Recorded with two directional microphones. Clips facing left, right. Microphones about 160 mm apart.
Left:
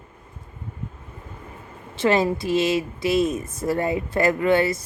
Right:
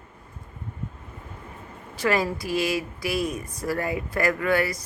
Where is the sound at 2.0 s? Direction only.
25° left (ahead or behind).